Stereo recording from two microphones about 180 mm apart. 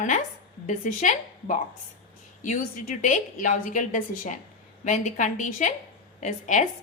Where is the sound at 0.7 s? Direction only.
45° left (ahead or behind).